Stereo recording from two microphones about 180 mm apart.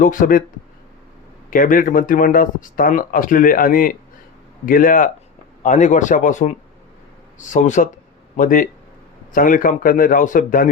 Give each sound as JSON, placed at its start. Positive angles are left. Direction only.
{"t": 0.0, "sound": "speech", "side_deg": 45}
{"t": 1.5, "sound": "speech", "side_deg": 50}